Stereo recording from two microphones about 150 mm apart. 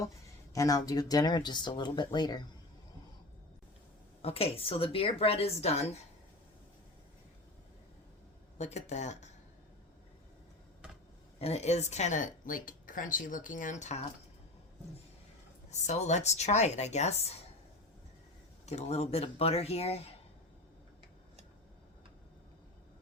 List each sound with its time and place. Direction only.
0.5 s speech: 20° left (ahead or behind)
4.2 s speech: 40° left (ahead or behind)
8.5 s a woman's voice: 50° left (ahead or behind)
11.3 s speech: 45° left (ahead or behind)
15.7 s a woman's voice: 50° left (ahead or behind)
18.6 s a woman's voice: 45° left (ahead or behind)